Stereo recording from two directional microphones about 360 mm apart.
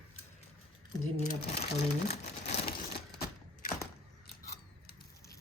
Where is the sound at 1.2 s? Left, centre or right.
Left.